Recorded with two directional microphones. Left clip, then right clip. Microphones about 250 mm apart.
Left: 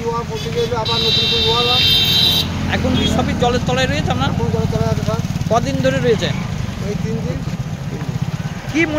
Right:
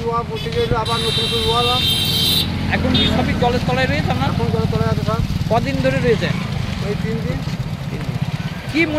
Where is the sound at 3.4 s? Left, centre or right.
Centre.